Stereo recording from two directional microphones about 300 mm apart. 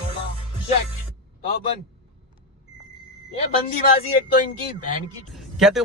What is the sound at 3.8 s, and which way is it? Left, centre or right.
Speech, left.